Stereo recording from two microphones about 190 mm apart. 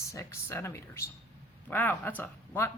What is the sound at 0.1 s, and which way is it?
Speech, 15° left (ahead or behind).